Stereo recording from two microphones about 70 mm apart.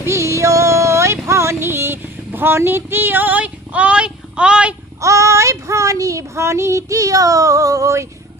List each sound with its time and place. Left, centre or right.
0.0 s music: right; by 4.7 s centre
5.0 s child singing: right